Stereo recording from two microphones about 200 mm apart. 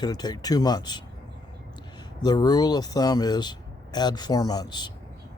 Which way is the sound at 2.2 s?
20° left (ahead or behind).